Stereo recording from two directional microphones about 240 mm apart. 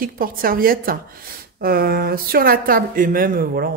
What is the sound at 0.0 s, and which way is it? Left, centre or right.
Speech, right.